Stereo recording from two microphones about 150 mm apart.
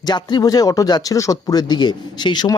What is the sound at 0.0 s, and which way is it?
Speech, 30° left (ahead or behind).